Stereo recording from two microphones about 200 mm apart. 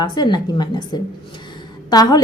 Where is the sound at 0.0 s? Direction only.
20° left (ahead or behind).